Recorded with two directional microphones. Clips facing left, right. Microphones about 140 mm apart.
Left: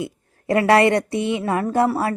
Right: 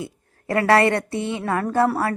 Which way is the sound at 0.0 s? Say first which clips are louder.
Left 4 dB; 20° left (ahead or behind).